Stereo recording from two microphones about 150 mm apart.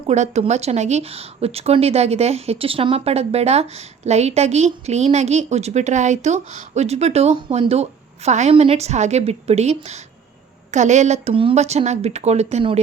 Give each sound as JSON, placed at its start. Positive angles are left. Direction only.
{"t": 0.1, "sound": "speech", "side_deg": -50}